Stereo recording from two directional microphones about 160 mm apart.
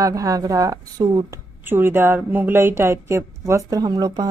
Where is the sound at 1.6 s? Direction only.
15° right (ahead or behind).